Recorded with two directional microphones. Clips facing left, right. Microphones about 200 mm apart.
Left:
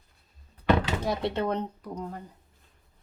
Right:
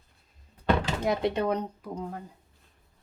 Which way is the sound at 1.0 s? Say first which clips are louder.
Right 2 dB; 20° right (ahead or behind).